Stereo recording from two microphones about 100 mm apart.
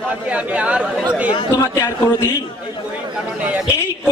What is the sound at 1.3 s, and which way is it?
Speech, 50° left (ahead or behind).